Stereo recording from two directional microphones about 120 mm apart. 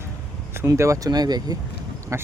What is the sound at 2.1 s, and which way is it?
Speech, 25° right (ahead or behind).